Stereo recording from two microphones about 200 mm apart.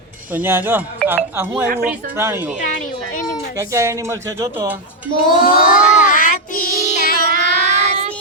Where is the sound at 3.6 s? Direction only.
15° right (ahead or behind).